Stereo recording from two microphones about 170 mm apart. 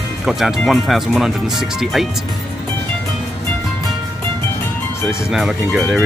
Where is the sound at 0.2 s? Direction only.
5° right (ahead or behind).